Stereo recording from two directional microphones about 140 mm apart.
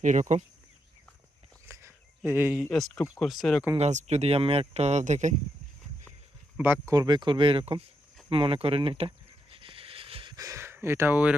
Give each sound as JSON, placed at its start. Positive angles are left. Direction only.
{"t": 0.0, "sound": "speech", "side_deg": -60}
{"t": 1.6, "sound": "a sound", "side_deg": -20}
{"t": 2.6, "sound": "speech", "side_deg": 5}
{"t": 3.8, "sound": "speech", "side_deg": -55}
{"t": 6.6, "sound": "speech", "side_deg": -15}
{"t": 6.9, "sound": "speech", "side_deg": -30}
{"t": 8.3, "sound": "a sound", "side_deg": -40}
{"t": 10.3, "sound": "speech", "side_deg": -25}